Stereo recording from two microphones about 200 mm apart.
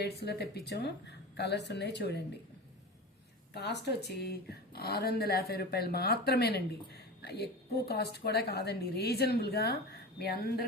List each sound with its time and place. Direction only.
0.0 s a woman's voice: 55° left (ahead or behind)
3.5 s speech: 55° left (ahead or behind)